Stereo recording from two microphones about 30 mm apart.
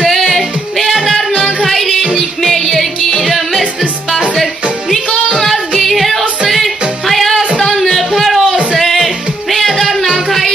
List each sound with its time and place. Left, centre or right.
0.2 s music: centre
5.8 s music: centre
7.6 s a sound: centre
8.7 s music: centre